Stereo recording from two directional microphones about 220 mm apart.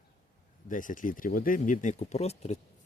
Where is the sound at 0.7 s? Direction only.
35° left (ahead or behind).